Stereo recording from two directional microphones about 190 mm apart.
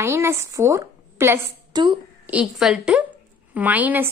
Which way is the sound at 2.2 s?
5° right (ahead or behind).